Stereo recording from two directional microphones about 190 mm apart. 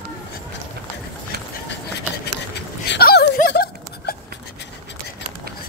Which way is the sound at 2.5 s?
60° left (ahead or behind).